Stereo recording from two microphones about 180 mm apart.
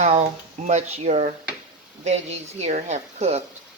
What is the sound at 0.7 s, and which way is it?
Speech, 40° right (ahead or behind).